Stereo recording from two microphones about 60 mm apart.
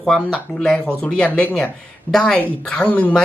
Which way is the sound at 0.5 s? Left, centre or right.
Centre.